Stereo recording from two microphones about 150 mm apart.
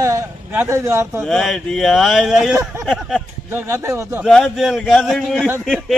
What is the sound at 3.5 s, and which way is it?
Speech, 15° right (ahead or behind).